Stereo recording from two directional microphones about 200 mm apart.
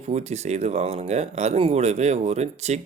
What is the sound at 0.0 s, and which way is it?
Speech, 35° right (ahead or behind).